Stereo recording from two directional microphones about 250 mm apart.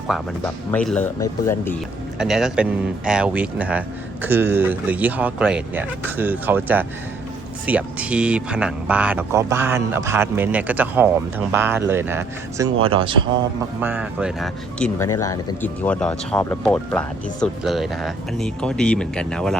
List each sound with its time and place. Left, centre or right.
0.1 s speech: centre
2.1 s speech: centre
13.8 s speech: centre